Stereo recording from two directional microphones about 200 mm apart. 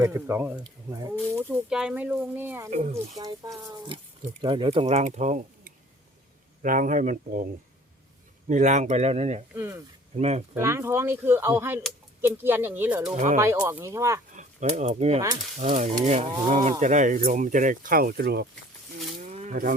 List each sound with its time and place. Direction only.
0.0 s speech: 10° right (ahead or behind)
2.6 s speech: 35° right (ahead or behind)
2.9 s speech: 20° right (ahead or behind); by 7.4 s 40° right (ahead or behind)
8.4 s speech: 35° right (ahead or behind)
9.6 s speech: 15° right (ahead or behind)
10.2 s speech: 35° right (ahead or behind)
10.5 s speech: 10° right (ahead or behind)
13.1 s speech: 40° right (ahead or behind)
13.4 s speech: 15° right (ahead or behind)
14.3 s speech: 35° right (ahead or behind); by 18.4 s 55° right (ahead or behind)
19.1 s wild animals: 35° right (ahead or behind)